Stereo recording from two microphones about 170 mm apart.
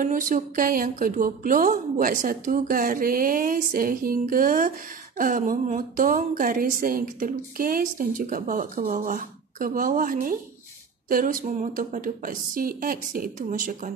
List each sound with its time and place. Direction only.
0.0 s a woman's voice: 55° right (ahead or behind)